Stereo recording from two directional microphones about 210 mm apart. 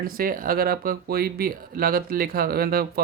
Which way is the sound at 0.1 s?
40° right (ahead or behind).